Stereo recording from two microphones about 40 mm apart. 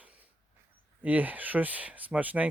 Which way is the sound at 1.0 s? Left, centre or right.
Right.